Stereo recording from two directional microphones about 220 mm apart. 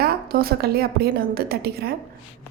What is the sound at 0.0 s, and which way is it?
A woman's voice, 45° right (ahead or behind).